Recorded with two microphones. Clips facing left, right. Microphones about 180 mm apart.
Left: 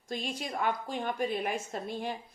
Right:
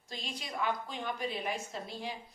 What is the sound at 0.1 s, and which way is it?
Speech, 50° left (ahead or behind).